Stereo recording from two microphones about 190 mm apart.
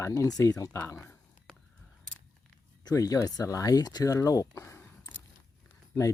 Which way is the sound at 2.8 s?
20° left (ahead or behind).